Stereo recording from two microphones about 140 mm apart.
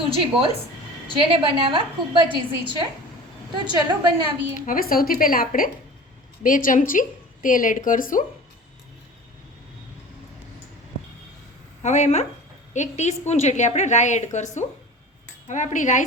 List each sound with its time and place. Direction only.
0.1 s a woman's voice: 40° right (ahead or behind)
4.6 s speech: 85° left
6.4 s a woman's voice: 75° left (ahead or behind)
11.8 s a woman's voice: 55° left (ahead or behind)